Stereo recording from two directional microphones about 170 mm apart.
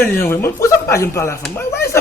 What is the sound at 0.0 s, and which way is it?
A man's voice, 15° left (ahead or behind).